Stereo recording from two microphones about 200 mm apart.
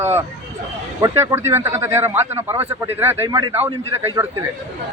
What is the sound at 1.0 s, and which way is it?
A man's voice, 15° right (ahead or behind).